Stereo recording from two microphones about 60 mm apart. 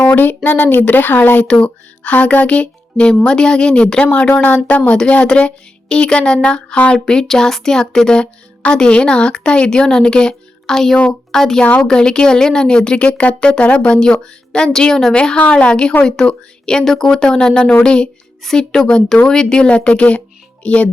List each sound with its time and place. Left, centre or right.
0.0 s speech: left
1.5 s speech: centre
7.0 s speech: centre